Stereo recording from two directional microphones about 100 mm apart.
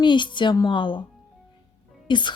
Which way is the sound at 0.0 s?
50° left (ahead or behind).